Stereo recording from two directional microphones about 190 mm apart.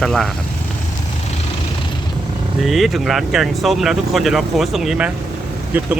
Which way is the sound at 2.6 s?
Centre (ahead or behind).